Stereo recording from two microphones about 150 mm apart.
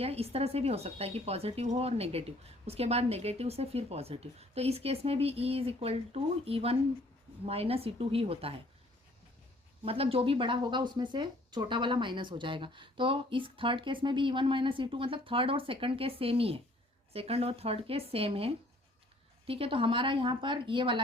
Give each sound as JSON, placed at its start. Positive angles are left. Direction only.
{"t": 0.0, "sound": "speech", "side_deg": -40}
{"t": 9.8, "sound": "speech", "side_deg": -40}